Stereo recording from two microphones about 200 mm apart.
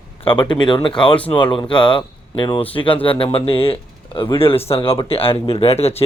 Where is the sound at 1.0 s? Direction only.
5° left (ahead or behind).